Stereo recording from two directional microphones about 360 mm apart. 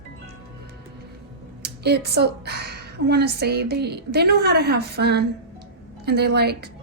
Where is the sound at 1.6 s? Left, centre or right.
Right.